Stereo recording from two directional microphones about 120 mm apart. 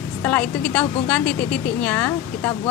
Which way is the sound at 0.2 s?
10° left (ahead or behind).